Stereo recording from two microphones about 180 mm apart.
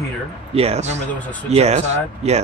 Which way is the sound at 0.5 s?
35° right (ahead or behind).